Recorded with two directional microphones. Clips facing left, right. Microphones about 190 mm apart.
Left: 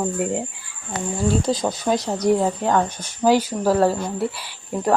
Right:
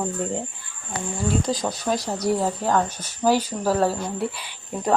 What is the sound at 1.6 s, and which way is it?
Speech, 25° left (ahead or behind).